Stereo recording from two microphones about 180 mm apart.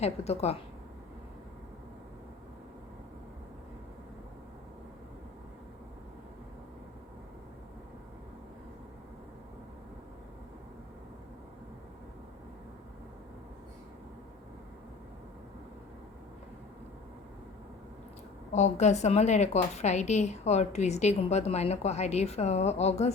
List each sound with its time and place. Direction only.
0.0 s a woman's voice: 35° left (ahead or behind)
18.5 s a woman's voice: 40° left (ahead or behind)